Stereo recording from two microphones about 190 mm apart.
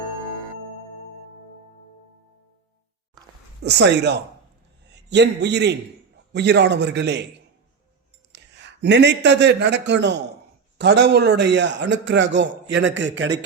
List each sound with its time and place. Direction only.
3.6 s a man's voice: 60° right (ahead or behind)
8.3 s a man's voice: 65° right (ahead or behind)